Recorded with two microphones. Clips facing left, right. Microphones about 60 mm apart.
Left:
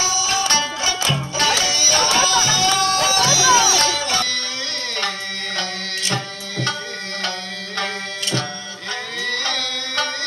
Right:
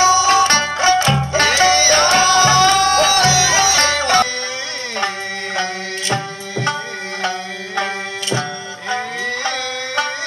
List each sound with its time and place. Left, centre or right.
0.0 s music: right
7.2 s tabla: centre
8.9 s music: centre